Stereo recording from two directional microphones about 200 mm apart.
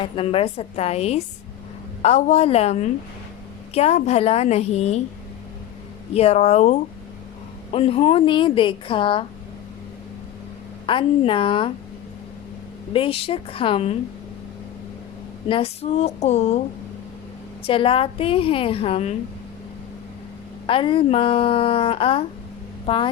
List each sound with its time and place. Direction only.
0.0 s a woman's voice: 30° left (ahead or behind)
6.1 s a woman's voice: 30° left (ahead or behind)
10.8 s a woman's voice: 25° left (ahead or behind)
12.9 s a woman's voice: 25° left (ahead or behind)
15.4 s a woman's voice: 30° left (ahead or behind)
17.7 s a woman's voice: 25° left (ahead or behind)
20.7 s a woman's voice: 25° left (ahead or behind)